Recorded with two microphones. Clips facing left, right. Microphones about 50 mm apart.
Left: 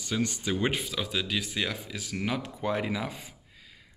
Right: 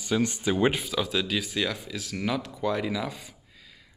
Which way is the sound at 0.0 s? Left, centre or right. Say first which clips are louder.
Right 4 dB; centre.